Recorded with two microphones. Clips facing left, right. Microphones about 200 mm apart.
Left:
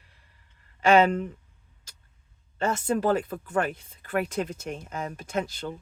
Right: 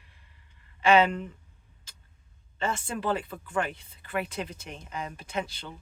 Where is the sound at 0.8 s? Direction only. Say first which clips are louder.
Left 2 dB; 45° left (ahead or behind).